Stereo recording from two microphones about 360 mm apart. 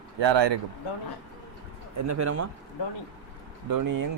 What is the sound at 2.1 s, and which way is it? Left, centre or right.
Speech, right.